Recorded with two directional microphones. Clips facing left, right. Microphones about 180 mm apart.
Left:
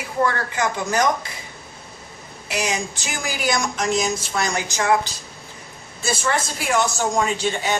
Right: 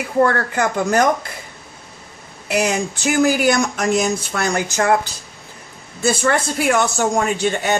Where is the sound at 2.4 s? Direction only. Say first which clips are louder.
Right 6 dB; 55° right (ahead or behind).